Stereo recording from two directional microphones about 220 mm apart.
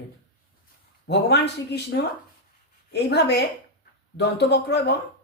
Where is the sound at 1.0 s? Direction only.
50° left (ahead or behind).